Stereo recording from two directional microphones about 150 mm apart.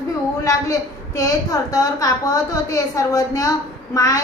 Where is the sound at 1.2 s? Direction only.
25° left (ahead or behind).